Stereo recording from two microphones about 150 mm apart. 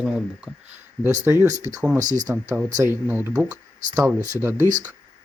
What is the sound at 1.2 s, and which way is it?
Speech, 15° right (ahead or behind).